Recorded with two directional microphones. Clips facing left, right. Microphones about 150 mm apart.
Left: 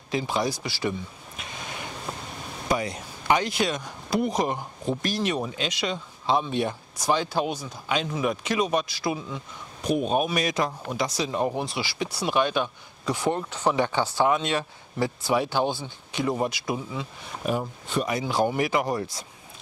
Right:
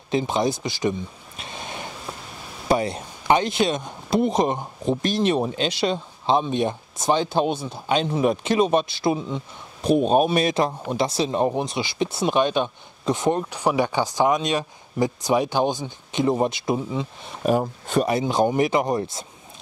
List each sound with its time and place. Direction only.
0.1 s speech: 20° right (ahead or behind)
2.7 s speech: 30° right (ahead or behind)
17.5 s speech: 45° right (ahead or behind)
18.1 s speech: 20° right (ahead or behind)